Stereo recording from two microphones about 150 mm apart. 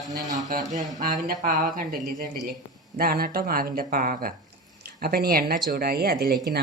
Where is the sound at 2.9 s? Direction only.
85° right; by 4.3 s 65° right (ahead or behind).